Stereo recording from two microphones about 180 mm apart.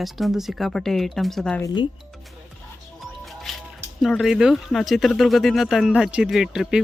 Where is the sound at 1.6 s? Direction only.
25° left (ahead or behind).